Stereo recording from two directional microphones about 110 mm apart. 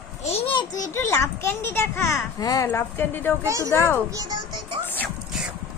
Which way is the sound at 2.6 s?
20° left (ahead or behind).